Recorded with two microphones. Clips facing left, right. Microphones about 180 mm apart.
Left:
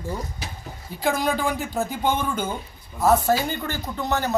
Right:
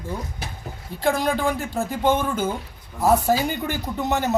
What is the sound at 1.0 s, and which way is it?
A man's voice, centre (ahead or behind).